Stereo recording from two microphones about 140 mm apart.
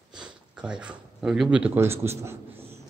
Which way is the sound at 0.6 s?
5° right (ahead or behind).